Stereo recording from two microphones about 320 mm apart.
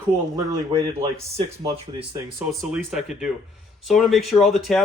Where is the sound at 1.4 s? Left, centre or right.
Centre.